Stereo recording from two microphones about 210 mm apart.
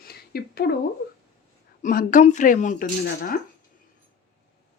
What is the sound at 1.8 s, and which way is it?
Speech, 40° left (ahead or behind).